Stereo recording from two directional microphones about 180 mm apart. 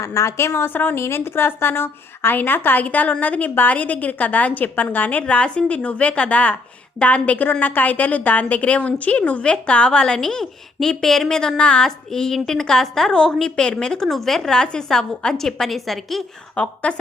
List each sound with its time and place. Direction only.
0.0 s a woman's voice: 15° left (ahead or behind)